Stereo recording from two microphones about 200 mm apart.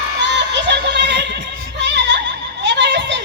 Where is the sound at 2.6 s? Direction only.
60° right (ahead or behind).